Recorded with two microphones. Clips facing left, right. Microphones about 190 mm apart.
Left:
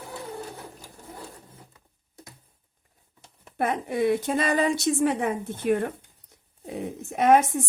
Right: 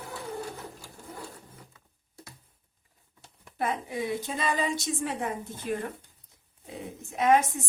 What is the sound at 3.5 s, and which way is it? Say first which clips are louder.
A woman's voice: left 4 dB; 65° left (ahead or behind).